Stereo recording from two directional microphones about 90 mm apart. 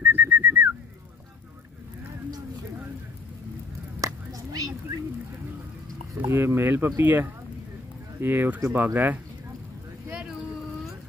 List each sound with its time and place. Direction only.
0.0 s whistling: 25° right (ahead or behind)
4.0 s a sound: 40° right (ahead or behind)
6.1 s speech: 25° right (ahead or behind)